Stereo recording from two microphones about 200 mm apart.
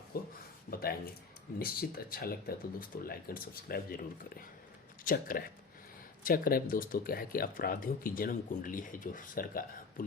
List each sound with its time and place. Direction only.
0.1 s a sound: 50° left (ahead or behind)
1.5 s speech: 50° left (ahead or behind)
5.0 s speech: 45° left (ahead or behind)